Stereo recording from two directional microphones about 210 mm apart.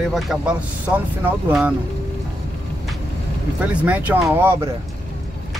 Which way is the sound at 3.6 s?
5° right (ahead or behind).